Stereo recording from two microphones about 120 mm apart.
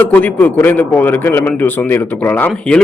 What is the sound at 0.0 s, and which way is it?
A man's voice, 10° left (ahead or behind).